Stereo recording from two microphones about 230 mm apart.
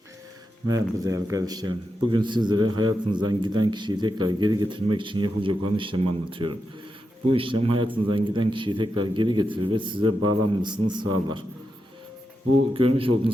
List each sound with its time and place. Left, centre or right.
0.7 s a man's voice: centre
12.7 s a man's voice: right